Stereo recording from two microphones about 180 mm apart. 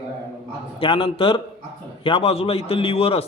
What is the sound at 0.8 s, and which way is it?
A man's voice, 30° left (ahead or behind).